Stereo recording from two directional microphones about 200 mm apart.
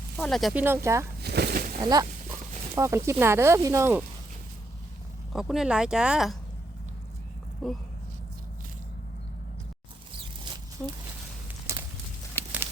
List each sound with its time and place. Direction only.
0.2 s speech: centre (ahead or behind)
0.6 s speech: 10° right (ahead or behind)
1.2 s a sound: 55° right (ahead or behind)
1.8 s speech: 20° right (ahead or behind)
5.3 s speech: centre (ahead or behind)
7.6 s speech: centre (ahead or behind)
10.8 s speech: 5° left (ahead or behind)
11.7 s a sound: 15° right (ahead or behind)